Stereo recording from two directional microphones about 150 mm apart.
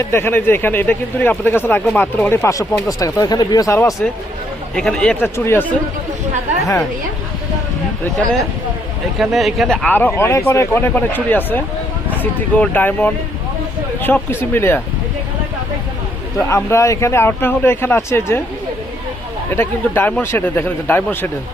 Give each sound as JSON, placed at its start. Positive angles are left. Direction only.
{"t": 0.0, "sound": "speech", "side_deg": 15}
{"t": 4.7, "sound": "speech", "side_deg": 5}
{"t": 9.1, "sound": "speech", "side_deg": 0}
{"t": 16.5, "sound": "speech", "side_deg": 20}
{"t": 19.5, "sound": "speech", "side_deg": 15}